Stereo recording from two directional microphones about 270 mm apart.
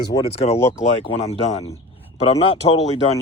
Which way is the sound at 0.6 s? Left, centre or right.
Centre.